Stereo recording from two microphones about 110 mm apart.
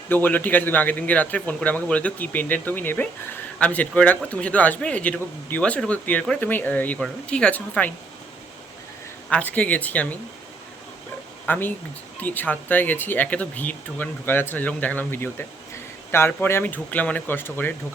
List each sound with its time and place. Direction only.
0.1 s speech: 15° left (ahead or behind)
9.3 s speech: 10° left (ahead or behind)
11.4 s speech: 15° left (ahead or behind)